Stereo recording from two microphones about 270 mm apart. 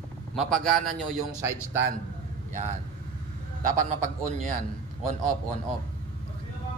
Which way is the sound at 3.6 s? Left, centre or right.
Right.